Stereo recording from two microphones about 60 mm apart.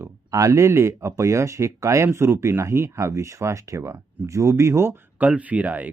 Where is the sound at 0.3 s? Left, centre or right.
Right.